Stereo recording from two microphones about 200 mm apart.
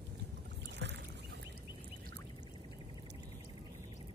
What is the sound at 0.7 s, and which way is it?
Boat, 60° right (ahead or behind).